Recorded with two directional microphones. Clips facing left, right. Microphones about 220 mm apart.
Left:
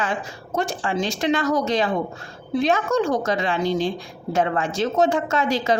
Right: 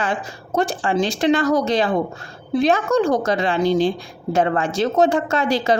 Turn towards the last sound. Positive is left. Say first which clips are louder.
# right 2 dB
turn(degrees=-35)  # may be behind; listen again after turning